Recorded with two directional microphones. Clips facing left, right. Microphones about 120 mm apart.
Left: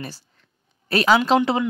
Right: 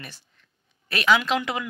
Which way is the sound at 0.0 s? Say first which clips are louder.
Left 8 dB; 35° left (ahead or behind).